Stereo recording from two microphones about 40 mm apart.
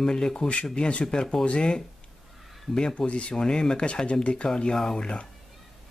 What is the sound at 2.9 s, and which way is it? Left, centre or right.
Speech, left.